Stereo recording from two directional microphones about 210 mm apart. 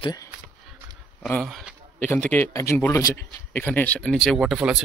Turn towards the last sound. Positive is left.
turn(degrees=0)  # may be behind; listen again after turning